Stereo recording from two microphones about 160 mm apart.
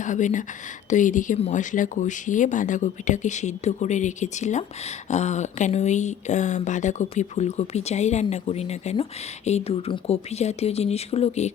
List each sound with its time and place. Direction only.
0.0 s speech: 50° left (ahead or behind)